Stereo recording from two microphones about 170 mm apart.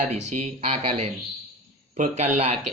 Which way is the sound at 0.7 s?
40° right (ahead or behind).